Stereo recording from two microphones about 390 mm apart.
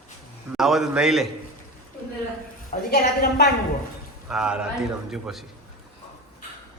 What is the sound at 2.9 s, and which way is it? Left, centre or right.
Speech, left.